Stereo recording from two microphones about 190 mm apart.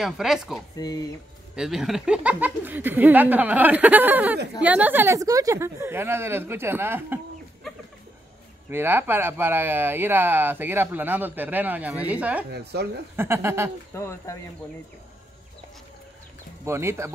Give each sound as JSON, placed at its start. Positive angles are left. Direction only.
{"t": 0.0, "sound": "speech", "side_deg": 0}
{"t": 0.7, "sound": "speech", "side_deg": 20}
{"t": 1.5, "sound": "speech", "side_deg": -5}
{"t": 8.6, "sound": "speech", "side_deg": -10}
{"t": 12.5, "sound": "speech", "side_deg": -60}
{"t": 13.1, "sound": "speech", "side_deg": -10}
{"t": 13.9, "sound": "speech", "side_deg": 15}
{"t": 16.6, "sound": "speech", "side_deg": -15}